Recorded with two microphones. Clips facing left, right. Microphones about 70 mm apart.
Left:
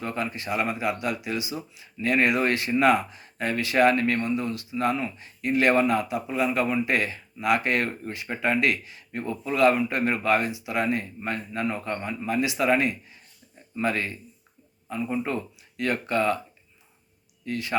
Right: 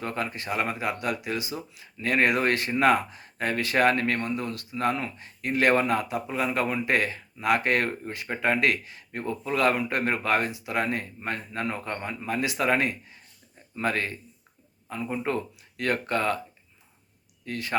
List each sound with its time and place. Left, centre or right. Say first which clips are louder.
0.0 s speech: left 1 dB; right
17.4 s speech: left 2 dB; right